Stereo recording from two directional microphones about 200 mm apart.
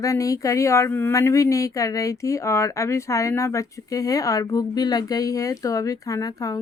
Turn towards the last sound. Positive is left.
turn(degrees=15)  # may be behind; listen again after turning